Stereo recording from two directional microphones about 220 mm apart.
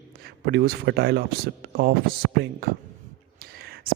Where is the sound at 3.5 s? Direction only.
45° right (ahead or behind).